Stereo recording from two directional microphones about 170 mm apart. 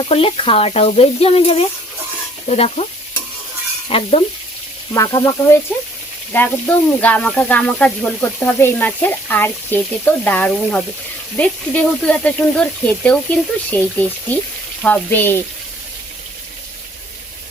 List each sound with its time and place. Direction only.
0.1 s speech: 35° left (ahead or behind)
3.8 s speech: 35° left (ahead or behind)
4.9 s sizzle: 20° left (ahead or behind)
6.3 s speech: 10° left (ahead or behind)